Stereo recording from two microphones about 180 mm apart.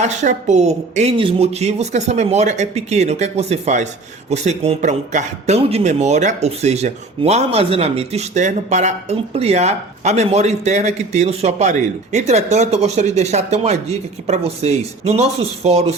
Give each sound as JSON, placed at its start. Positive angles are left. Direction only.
{"t": 0.0, "sound": "a man's voice", "side_deg": -40}